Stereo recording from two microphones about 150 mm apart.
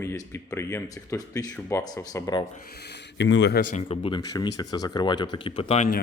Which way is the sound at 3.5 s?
60° left (ahead or behind).